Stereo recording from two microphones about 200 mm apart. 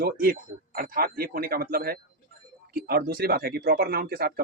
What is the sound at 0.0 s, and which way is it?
Speech, 50° right (ahead or behind).